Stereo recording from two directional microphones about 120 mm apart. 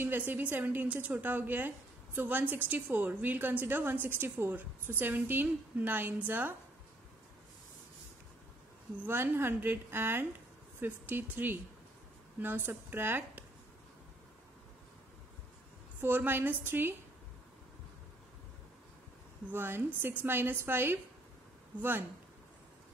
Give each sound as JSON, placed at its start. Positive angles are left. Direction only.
{"t": 0.0, "sound": "a woman's voice", "side_deg": -15}
{"t": 9.0, "sound": "a woman's voice", "side_deg": -20}
{"t": 16.0, "sound": "a woman's voice", "side_deg": -15}
{"t": 19.4, "sound": "a woman's voice", "side_deg": -15}